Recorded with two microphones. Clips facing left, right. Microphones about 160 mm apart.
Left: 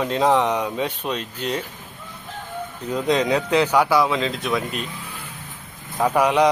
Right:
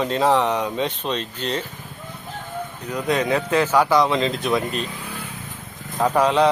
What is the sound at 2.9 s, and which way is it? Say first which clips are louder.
Speech: left 1 dB; 20° left (ahead or behind).